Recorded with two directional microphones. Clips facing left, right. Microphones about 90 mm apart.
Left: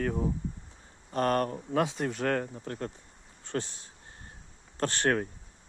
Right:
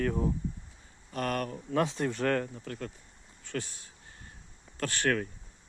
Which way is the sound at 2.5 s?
35° left (ahead or behind).